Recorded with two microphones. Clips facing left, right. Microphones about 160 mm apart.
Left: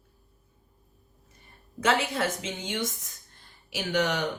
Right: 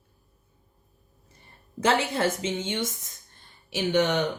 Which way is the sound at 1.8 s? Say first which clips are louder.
Right 2 dB; 30° right (ahead or behind).